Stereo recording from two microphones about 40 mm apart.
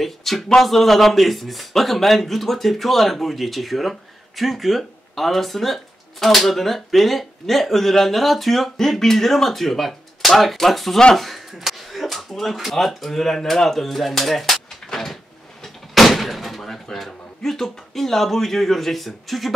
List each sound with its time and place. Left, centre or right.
0.0 s a man's voice: centre